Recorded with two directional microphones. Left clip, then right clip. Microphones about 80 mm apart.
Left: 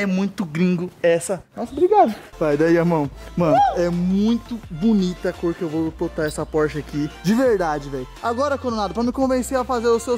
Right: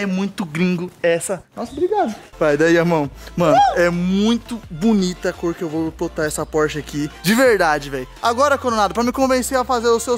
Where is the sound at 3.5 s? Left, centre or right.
Centre.